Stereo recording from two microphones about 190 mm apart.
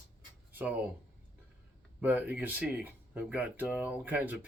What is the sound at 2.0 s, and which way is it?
Speech, 10° right (ahead or behind).